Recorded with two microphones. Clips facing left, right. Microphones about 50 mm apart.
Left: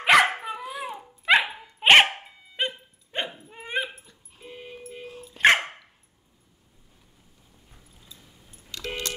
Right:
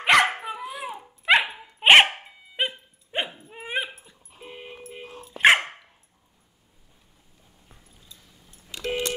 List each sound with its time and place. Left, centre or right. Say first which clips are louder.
0.0 s dog: even; centre
4.4 s dog: right 1 dB; right
5.4 s dog: right 1 dB; centre
8.7 s keys jangling: right 5 dB; centre